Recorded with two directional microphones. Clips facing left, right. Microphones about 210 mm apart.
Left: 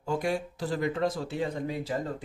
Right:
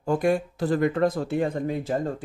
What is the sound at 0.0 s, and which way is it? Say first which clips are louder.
Speech: right 7 dB; 50° right (ahead or behind).